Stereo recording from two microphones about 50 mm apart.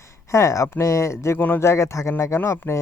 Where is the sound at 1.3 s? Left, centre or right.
Left.